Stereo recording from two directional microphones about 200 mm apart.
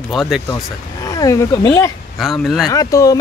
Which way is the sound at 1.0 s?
15° left (ahead or behind).